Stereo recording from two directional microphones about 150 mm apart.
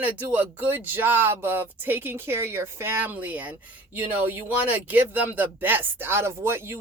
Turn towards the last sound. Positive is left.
turn(degrees=-15)  # may be behind; listen again after turning